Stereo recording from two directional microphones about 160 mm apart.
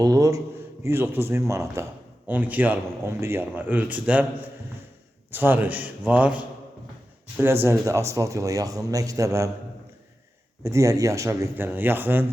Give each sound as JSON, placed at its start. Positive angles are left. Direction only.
{"t": 0.0, "sound": "a sound", "side_deg": -20}
{"t": 0.9, "sound": "a man's voice", "side_deg": -15}
{"t": 5.3, "sound": "a man's voice", "side_deg": -15}
{"t": 10.6, "sound": "a man's voice", "side_deg": -20}